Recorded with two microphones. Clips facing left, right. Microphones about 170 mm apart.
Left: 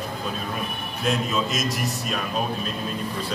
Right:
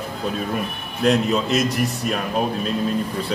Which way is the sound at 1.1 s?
65° right (ahead or behind).